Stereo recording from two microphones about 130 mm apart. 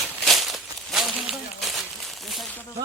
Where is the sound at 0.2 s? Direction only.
Centre (ahead or behind).